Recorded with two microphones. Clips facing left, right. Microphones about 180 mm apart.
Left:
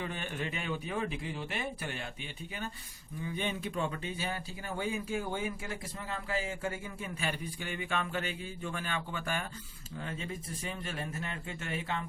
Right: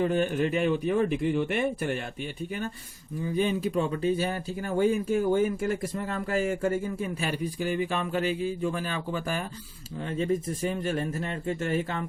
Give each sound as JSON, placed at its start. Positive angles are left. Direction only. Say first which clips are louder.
{"t": 0.0, "sound": "a man's voice", "louder": "right 13 dB", "side_deg": -45}
{"t": 3.3, "sound": "a man's voice", "louder": "right 10 dB", "side_deg": -35}